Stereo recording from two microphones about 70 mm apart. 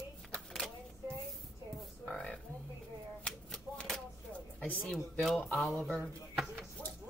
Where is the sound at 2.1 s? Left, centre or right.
Centre.